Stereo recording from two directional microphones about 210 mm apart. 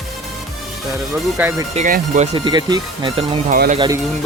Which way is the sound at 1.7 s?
35° right (ahead or behind).